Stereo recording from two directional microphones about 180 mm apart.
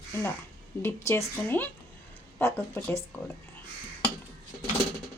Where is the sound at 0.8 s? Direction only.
15° left (ahead or behind).